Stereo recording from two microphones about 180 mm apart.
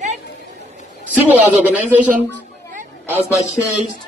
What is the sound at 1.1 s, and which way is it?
Speech, 10° right (ahead or behind).